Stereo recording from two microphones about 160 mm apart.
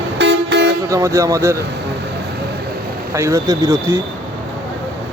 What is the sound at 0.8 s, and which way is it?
Speech, 20° right (ahead or behind).